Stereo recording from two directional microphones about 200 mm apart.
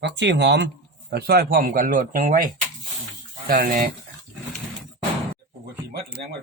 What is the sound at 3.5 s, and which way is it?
Speech, 45° right (ahead or behind).